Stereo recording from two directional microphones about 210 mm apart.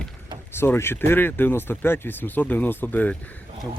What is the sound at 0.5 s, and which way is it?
Speech, 10° left (ahead or behind).